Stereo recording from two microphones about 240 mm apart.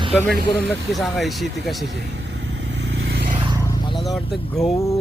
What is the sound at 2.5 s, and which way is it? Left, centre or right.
Vehicle, right.